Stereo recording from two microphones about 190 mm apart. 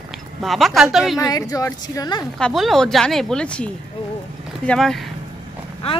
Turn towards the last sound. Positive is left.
turn(degrees=30)  # may be behind; listen again after turning